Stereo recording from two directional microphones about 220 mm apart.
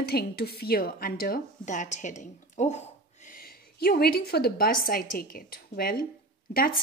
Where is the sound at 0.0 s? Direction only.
45° left (ahead or behind).